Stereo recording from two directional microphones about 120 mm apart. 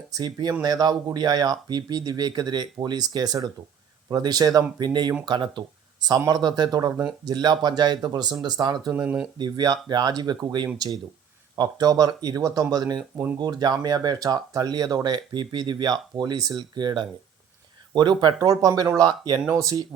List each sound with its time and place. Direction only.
0.1 s speech: 35° right (ahead or behind)
9.0 s speech: 10° right (ahead or behind)
9.4 s speech: 35° right (ahead or behind)